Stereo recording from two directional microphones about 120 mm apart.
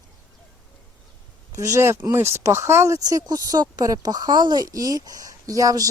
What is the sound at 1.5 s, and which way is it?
Speech, 25° right (ahead or behind).